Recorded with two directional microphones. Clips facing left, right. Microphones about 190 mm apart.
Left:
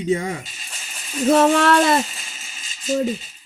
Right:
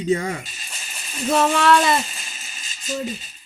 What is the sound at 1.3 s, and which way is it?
Speech, 50° left (ahead or behind).